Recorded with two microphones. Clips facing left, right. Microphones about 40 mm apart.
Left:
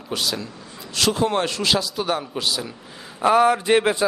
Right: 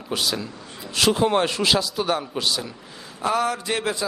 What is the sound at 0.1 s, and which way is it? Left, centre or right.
A man's voice, centre.